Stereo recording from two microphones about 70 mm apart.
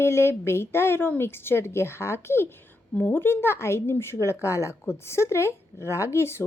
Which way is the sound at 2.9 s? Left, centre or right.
Left.